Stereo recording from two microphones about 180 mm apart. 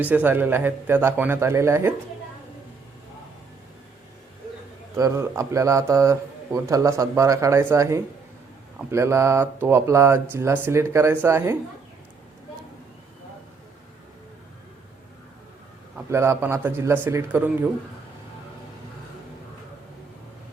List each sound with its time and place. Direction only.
0.0 s a man's voice: 10° right (ahead or behind)
4.9 s a man's voice: 15° right (ahead or behind)
16.0 s a man's voice: 15° right (ahead or behind)